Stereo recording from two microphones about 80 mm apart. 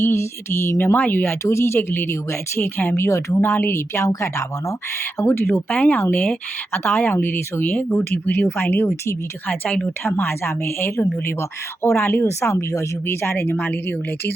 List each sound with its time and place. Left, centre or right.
0.0 s speech: left